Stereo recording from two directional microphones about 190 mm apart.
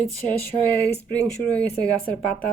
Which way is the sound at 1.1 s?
5° left (ahead or behind).